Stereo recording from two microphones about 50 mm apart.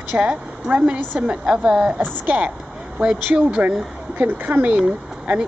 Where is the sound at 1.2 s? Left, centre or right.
Right.